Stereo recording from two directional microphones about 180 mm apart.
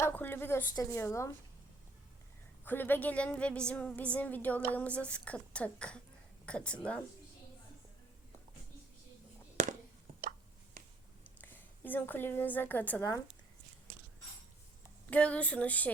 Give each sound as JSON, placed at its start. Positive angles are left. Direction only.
{"t": 0.0, "sound": "a woman's voice", "side_deg": 10}
{"t": 2.6, "sound": "a woman's voice", "side_deg": 10}
{"t": 10.8, "sound": "a sound", "side_deg": -50}
{"t": 11.3, "sound": "a woman's voice", "side_deg": 10}
{"t": 15.1, "sound": "a woman's voice", "side_deg": 5}